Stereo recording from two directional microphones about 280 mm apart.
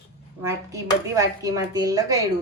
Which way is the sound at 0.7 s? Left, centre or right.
Centre.